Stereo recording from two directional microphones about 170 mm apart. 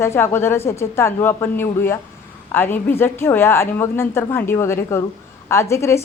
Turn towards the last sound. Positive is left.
turn(degrees=15)  # may be behind; listen again after turning